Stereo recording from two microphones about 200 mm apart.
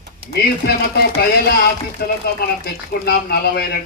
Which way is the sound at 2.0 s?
55° left (ahead or behind).